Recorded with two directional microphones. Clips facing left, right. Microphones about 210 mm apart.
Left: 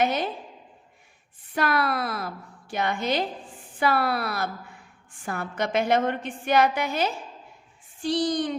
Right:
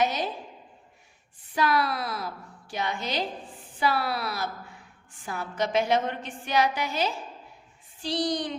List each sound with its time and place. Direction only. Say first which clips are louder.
0.0 s a woman's voice: left 2 dB; 55° left (ahead or behind)
1.5 s a woman's voice: left 1 dB; 55° left (ahead or behind)